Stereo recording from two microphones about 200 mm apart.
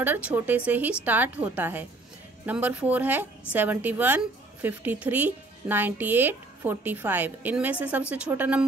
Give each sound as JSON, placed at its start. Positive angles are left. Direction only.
{"t": 0.0, "sound": "a woman's voice", "side_deg": -10}